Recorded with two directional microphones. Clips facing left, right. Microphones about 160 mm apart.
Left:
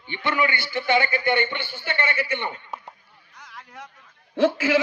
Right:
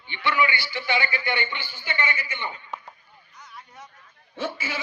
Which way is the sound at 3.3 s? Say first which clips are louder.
Left 3 dB; 80° left.